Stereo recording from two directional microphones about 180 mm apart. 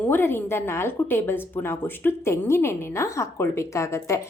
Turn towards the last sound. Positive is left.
turn(degrees=15)  # may be behind; listen again after turning